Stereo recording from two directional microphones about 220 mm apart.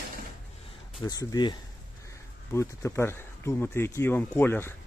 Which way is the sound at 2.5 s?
10° left (ahead or behind).